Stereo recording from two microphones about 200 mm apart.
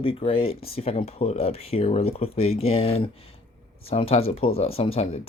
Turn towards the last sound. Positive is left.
turn(degrees=30)  # may be behind; listen again after turning